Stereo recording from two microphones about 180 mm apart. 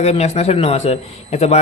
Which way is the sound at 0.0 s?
35° left (ahead or behind).